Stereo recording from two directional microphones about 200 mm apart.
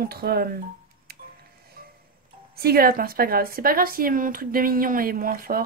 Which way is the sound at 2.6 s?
50° right (ahead or behind).